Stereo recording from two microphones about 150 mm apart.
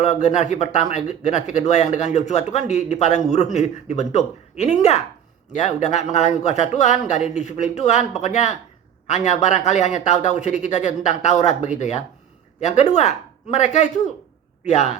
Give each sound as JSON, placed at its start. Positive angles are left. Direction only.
{"t": 0.0, "sound": "a man's voice", "side_deg": 50}